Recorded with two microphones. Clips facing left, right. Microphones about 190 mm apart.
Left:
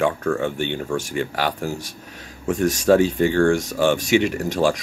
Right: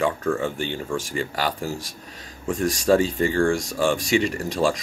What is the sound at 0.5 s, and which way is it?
Speech, 60° left (ahead or behind).